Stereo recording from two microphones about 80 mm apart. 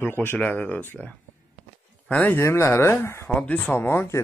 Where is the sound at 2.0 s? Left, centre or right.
Centre.